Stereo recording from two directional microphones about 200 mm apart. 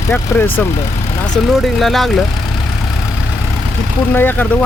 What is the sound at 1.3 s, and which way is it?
Speech, centre (ahead or behind).